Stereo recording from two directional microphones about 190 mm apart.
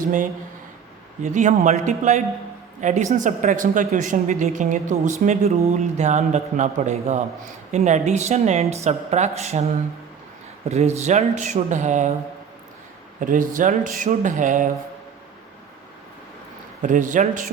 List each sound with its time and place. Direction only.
0.0 s speech: 45° right (ahead or behind)
10.7 s speech: 35° right (ahead or behind)
13.1 s speech: 45° right (ahead or behind)
16.8 s speech: 40° right (ahead or behind)